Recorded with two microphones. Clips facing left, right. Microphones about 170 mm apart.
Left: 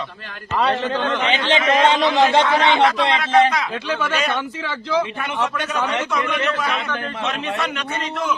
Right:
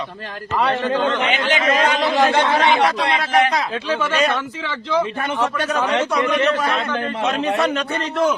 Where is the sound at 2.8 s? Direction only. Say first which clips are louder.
Left 1 dB; 25° left (ahead or behind).